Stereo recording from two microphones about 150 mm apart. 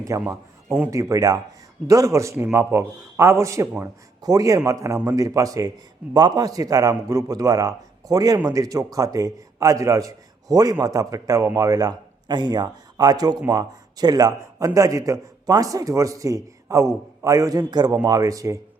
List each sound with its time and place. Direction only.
0.2 s speech: 5° right (ahead or behind)
0.9 s a man's voice: 20° right (ahead or behind)